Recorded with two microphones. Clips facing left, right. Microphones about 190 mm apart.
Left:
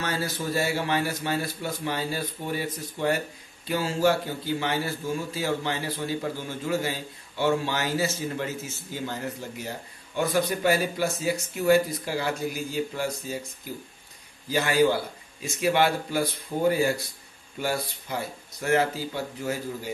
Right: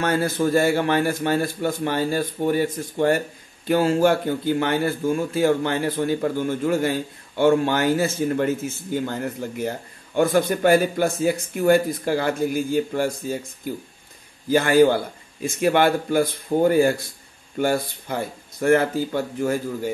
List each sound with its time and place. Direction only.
0.0 s a man's voice: 55° right (ahead or behind)
14.5 s a man's voice: 50° right (ahead or behind)